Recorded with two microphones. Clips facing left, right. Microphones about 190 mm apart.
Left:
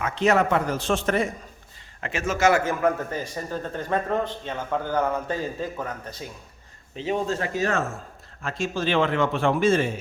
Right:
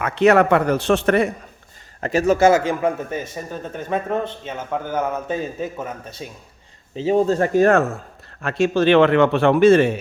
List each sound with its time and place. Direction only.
0.0 s a man's voice: 65° right (ahead or behind)
2.0 s a man's voice: 40° right (ahead or behind)
2.5 s a man's voice: 15° right (ahead or behind)
6.9 s speech: 35° right (ahead or behind); by 10.0 s 70° right (ahead or behind)